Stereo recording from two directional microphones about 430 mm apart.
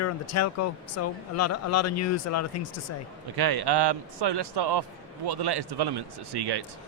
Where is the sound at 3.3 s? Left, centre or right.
Right.